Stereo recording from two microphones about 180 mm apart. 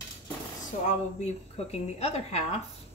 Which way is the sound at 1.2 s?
35° left (ahead or behind).